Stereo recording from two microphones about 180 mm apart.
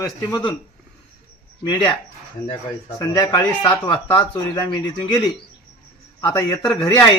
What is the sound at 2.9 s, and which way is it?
A man's voice, 20° left (ahead or behind).